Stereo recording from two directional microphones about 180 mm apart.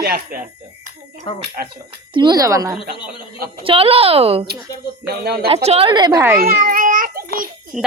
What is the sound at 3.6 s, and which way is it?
A woman's voice, 30° right (ahead or behind).